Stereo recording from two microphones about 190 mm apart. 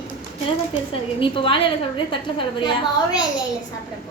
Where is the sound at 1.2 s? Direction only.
25° left (ahead or behind).